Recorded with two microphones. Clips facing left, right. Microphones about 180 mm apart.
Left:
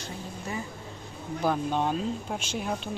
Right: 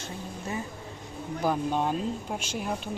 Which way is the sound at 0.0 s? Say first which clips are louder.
Right 1 dB; 25° right (ahead or behind).